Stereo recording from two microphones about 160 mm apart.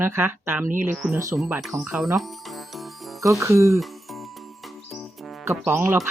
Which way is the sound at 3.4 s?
20° right (ahead or behind).